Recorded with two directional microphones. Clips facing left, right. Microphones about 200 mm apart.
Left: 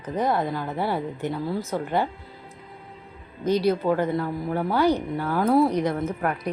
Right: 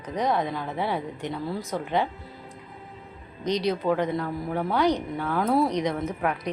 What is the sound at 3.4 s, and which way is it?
Speech, 5° left (ahead or behind).